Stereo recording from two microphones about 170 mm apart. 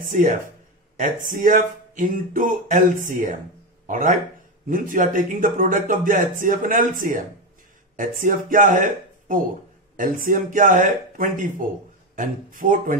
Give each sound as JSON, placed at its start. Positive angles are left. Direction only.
{"t": 0.1, "sound": "a man's voice", "side_deg": -50}
{"t": 9.9, "sound": "speech", "side_deg": -55}